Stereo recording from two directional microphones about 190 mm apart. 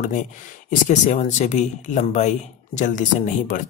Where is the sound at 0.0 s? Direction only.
45° left (ahead or behind).